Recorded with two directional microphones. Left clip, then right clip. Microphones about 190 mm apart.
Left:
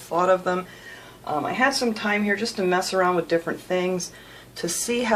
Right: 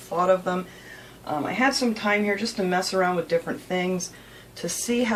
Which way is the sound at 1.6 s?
45° left (ahead or behind).